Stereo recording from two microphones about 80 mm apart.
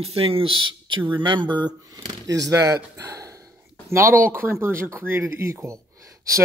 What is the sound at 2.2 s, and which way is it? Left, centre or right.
Speech, right.